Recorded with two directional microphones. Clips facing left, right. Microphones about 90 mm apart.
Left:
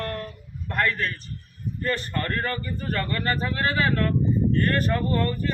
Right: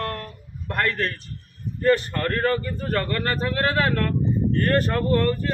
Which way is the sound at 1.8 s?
70° right (ahead or behind).